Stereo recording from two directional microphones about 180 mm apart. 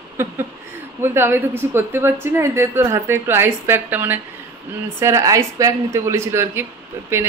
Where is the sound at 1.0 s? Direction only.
15° right (ahead or behind).